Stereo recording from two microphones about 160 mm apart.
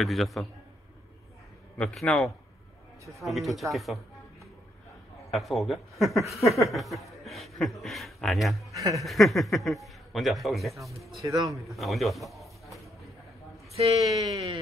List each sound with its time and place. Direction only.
0.0 s speech: centre (ahead or behind)
1.8 s speech: 5° left (ahead or behind)
5.3 s a man's voice: centre (ahead or behind)
8.7 s speech: 20° right (ahead or behind)
9.0 s speech: centre (ahead or behind)
11.2 s speech: 20° right (ahead or behind)
11.6 s a sound: centre (ahead or behind)
13.7 s music: 40° right (ahead or behind)